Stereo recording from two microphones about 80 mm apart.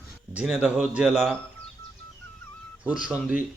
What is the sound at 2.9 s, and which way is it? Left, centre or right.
Speech, centre.